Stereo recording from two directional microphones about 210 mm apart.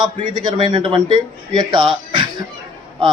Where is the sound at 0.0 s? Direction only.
20° right (ahead or behind).